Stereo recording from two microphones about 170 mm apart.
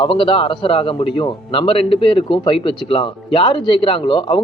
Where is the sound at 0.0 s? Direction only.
30° left (ahead or behind).